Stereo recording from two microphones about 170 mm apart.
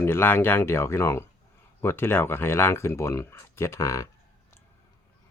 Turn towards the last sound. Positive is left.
turn(degrees=20)  # may be behind; listen again after turning